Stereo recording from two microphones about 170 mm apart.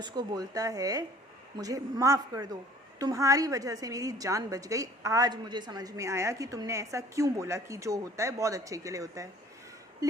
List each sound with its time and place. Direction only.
0.0 s a woman's voice: 25° right (ahead or behind)